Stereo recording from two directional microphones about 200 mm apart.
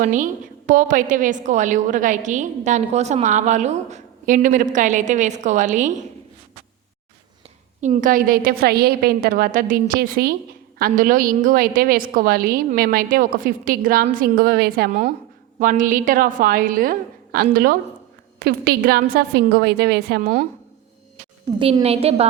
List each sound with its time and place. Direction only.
0.0 s a woman's voice: 40° right (ahead or behind)
7.8 s a woman's voice: 40° right (ahead or behind)
21.6 s a woman's voice: 30° right (ahead or behind)